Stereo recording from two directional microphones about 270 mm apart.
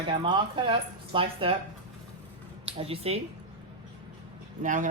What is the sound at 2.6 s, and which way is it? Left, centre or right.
Speech, right.